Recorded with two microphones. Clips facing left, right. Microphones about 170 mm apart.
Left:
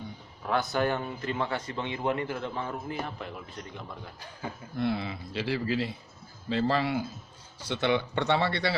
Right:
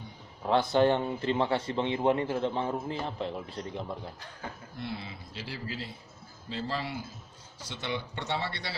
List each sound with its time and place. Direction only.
0.4 s a man's voice: 25° right (ahead or behind)
4.8 s speech: 65° left (ahead or behind)